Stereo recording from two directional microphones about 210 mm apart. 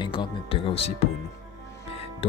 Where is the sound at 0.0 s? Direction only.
25° left (ahead or behind).